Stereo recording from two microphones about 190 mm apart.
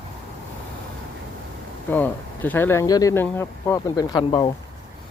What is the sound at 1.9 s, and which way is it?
Speech, 10° left (ahead or behind).